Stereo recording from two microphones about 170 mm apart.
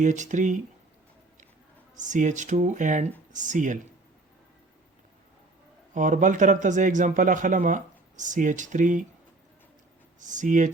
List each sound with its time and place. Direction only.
0.0 s a man's voice: 45° right (ahead or behind)
2.0 s a man's voice: 45° right (ahead or behind)
5.9 s a man's voice: 50° right (ahead or behind)
10.2 s a man's voice: 45° right (ahead or behind)